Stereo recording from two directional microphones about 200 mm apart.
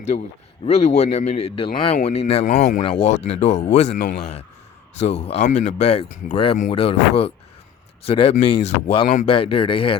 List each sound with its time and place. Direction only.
0.1 s speech: 40° left (ahead or behind)